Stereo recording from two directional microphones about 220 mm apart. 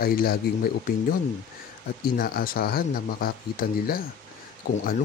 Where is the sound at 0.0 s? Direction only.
45° left (ahead or behind).